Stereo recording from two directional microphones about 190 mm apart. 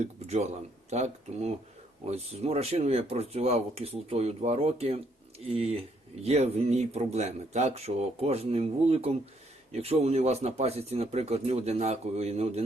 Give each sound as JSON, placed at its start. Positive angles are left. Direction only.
{"t": 0.0, "sound": "speech", "side_deg": -35}